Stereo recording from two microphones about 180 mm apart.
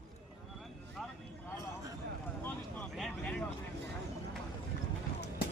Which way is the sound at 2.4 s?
5° left (ahead or behind).